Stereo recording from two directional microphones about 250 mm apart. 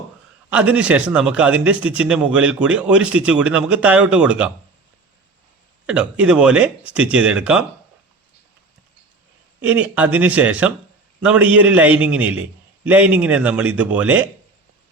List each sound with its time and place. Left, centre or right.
0.5 s a man's voice: centre
5.8 s a man's voice: centre
9.6 s a man's voice: centre